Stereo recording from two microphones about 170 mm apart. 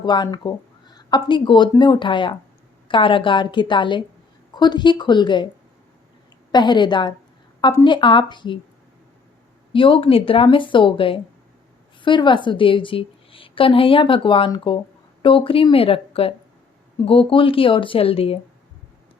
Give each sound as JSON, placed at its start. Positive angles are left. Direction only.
{"t": 0.0, "sound": "a woman's voice", "side_deg": 25}
{"t": 6.5, "sound": "a woman's voice", "side_deg": 25}
{"t": 9.7, "sound": "a woman's voice", "side_deg": 30}